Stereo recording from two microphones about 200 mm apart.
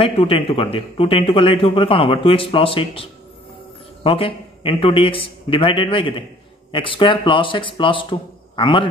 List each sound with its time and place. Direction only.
0.0 s a man's voice: 30° left (ahead or behind)